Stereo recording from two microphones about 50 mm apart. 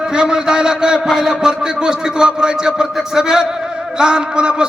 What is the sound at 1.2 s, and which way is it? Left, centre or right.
A man's voice, centre.